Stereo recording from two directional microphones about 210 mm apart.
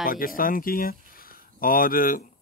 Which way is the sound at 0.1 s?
45° left (ahead or behind).